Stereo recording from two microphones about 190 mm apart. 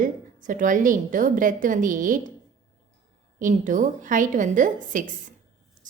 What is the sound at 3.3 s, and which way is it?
A woman's voice, 45° right (ahead or behind).